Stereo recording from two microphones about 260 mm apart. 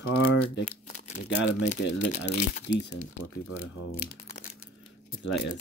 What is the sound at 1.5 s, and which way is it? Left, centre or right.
Speech, left.